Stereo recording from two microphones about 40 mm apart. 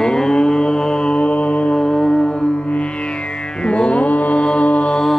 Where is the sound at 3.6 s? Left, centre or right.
Left.